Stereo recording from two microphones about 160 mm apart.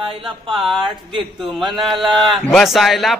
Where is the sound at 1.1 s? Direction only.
30° right (ahead or behind).